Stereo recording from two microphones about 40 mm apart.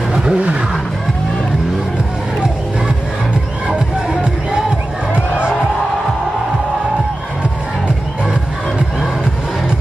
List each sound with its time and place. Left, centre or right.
0.1 s wild animals: centre
3.6 s music: right